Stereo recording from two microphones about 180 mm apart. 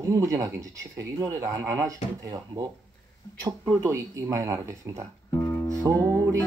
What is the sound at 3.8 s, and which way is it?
Speech, 15° right (ahead or behind).